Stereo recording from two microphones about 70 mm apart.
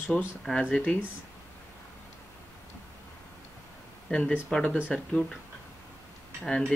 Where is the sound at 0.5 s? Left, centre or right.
Centre.